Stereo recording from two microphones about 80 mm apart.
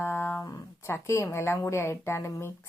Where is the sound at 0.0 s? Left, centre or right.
Left.